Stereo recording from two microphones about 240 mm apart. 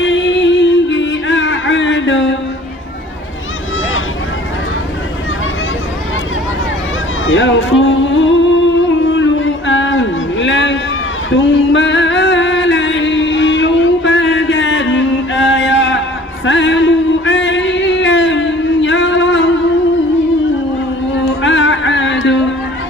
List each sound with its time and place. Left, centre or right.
0.0 s music: left
7.3 s music: left
9.0 s a sound: left
11.3 s music: left
21.4 s music: left